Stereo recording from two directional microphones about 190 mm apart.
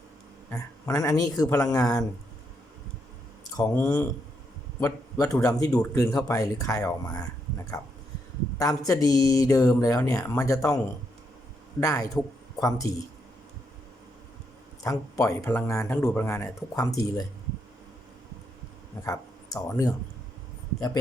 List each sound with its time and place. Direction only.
0.5 s speech: 20° left (ahead or behind)
3.5 s speech: 15° left (ahead or behind)
8.5 s speech: 20° left (ahead or behind)
11.8 s speech: 15° left (ahead or behind)
14.8 s speech: 15° left (ahead or behind)
19.0 s speech: 15° left (ahead or behind)